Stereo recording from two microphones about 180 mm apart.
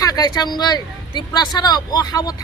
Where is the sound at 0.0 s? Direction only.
20° left (ahead or behind).